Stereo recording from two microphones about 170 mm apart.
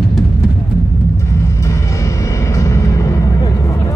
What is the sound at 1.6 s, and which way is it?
Music, 20° left (ahead or behind).